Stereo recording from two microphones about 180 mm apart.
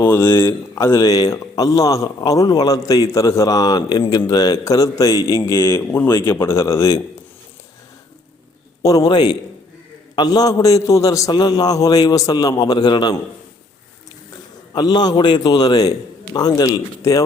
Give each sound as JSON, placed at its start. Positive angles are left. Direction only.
{"t": 0.0, "sound": "a man's voice", "side_deg": 15}
{"t": 8.8, "sound": "a man's voice", "side_deg": 20}
{"t": 14.8, "sound": "a man's voice", "side_deg": 20}